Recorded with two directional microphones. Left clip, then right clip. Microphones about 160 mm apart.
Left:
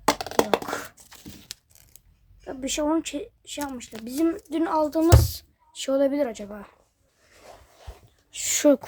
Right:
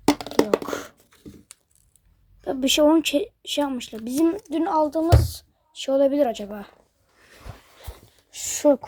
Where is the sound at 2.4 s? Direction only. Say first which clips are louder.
Right 8 dB; 25° right (ahead or behind).